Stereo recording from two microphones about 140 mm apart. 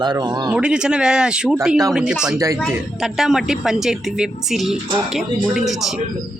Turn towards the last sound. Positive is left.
turn(degrees=0)  # may be behind; listen again after turning